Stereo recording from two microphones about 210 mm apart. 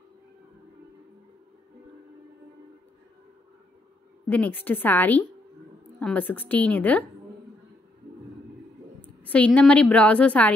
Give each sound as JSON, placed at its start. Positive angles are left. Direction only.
{"t": 4.3, "sound": "a woman's voice", "side_deg": 10}
{"t": 9.0, "sound": "a woman's voice", "side_deg": 5}